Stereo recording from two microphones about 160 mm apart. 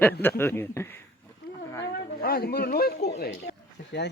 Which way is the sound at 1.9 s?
75° left (ahead or behind).